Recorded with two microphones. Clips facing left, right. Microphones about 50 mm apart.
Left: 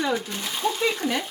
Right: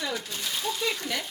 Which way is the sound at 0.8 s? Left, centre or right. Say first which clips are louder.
Left 6 dB; left.